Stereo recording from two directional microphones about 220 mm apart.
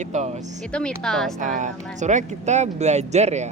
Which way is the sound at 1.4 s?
35° right (ahead or behind).